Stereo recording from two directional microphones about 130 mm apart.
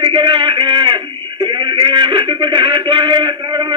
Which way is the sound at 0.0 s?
40° right (ahead or behind).